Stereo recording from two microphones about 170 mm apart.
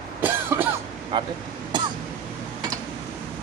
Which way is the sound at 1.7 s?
25° right (ahead or behind).